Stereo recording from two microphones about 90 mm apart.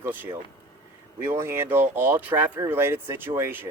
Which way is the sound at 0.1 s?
20° right (ahead or behind).